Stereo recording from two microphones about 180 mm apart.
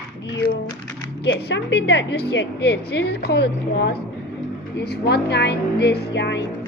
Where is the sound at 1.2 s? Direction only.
80° left.